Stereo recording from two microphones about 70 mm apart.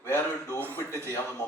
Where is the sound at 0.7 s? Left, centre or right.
Left.